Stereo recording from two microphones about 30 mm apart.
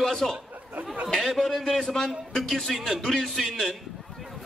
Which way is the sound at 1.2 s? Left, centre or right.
Centre.